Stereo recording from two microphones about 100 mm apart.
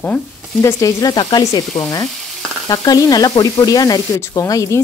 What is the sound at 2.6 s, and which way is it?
Speech, 40° left (ahead or behind).